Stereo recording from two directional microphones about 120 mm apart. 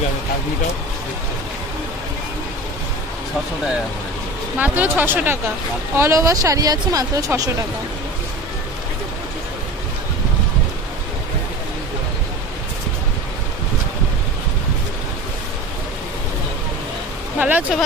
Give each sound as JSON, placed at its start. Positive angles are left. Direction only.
{"t": 4.6, "sound": "speech", "side_deg": -15}
{"t": 17.4, "sound": "speech", "side_deg": -10}